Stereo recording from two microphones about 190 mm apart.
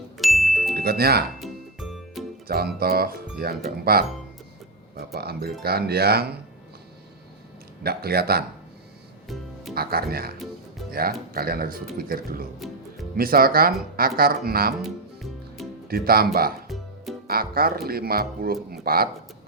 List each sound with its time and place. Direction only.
0.2 s music: centre (ahead or behind)
0.8 s speech: 55° right (ahead or behind)
1.4 s music: centre (ahead or behind)
2.5 s speech: 55° right (ahead or behind)
7.9 s speech: 55° right (ahead or behind)
9.7 s speech: 55° right (ahead or behind)
12.5 s music: centre (ahead or behind)
13.1 s speech: 50° right (ahead or behind)
15.9 s speech: 50° right (ahead or behind)
16.6 s music: centre (ahead or behind)
17.2 s speech: 50° right (ahead or behind)